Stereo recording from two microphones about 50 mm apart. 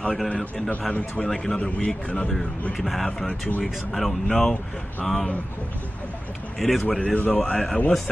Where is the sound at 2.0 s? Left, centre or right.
Left.